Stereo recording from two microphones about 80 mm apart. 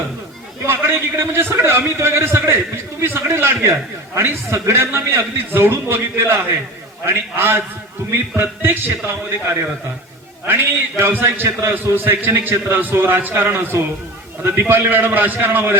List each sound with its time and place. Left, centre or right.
0.6 s a man's voice: right